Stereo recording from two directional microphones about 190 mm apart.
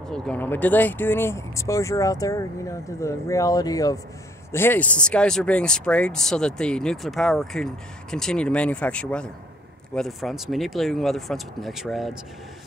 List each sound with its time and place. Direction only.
0.1 s speech: 10° left (ahead or behind)